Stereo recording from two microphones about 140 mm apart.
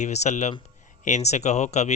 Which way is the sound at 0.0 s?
55° left (ahead or behind).